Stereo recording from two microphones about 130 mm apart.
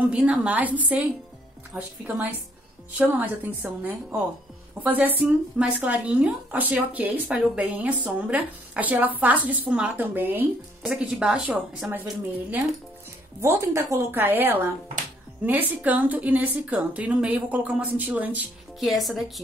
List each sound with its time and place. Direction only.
0.1 s speech: 10° right (ahead or behind)
3.0 s speech: 15° right (ahead or behind)
18.8 s speech: centre (ahead or behind)